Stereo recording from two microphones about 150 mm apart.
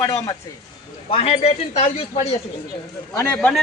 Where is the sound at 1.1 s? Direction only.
40° left (ahead or behind).